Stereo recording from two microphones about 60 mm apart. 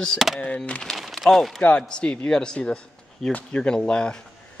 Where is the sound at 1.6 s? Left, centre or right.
Left.